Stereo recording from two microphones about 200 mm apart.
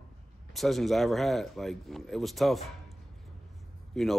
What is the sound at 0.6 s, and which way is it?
A man's voice, centre (ahead or behind).